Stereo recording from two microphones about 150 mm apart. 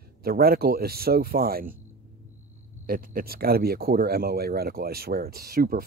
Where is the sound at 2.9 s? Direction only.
80° right.